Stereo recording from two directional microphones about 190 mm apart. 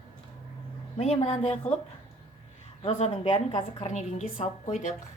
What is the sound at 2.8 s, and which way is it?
A woman's voice, 35° left (ahead or behind).